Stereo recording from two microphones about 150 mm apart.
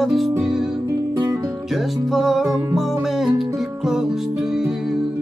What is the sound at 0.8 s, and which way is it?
Music, 25° right (ahead or behind).